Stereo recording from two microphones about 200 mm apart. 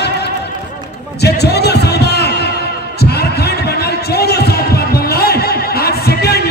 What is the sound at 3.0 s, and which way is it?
Heart sounds, 55° left (ahead or behind).